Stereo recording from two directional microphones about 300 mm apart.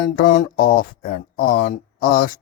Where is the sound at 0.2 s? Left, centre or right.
Left.